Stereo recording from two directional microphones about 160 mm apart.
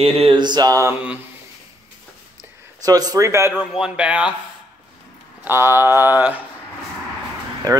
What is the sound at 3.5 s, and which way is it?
Speech, 5° right (ahead or behind).